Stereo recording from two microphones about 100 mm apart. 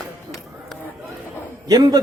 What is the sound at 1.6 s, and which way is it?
Speech, 40° right (ahead or behind).